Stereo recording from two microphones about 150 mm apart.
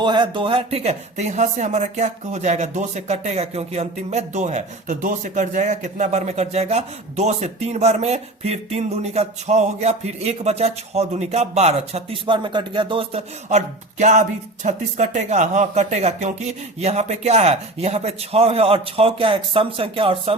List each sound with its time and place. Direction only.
0.0 s speech: 30° right (ahead or behind)